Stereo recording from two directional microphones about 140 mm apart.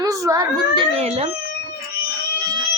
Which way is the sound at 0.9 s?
50° right (ahead or behind).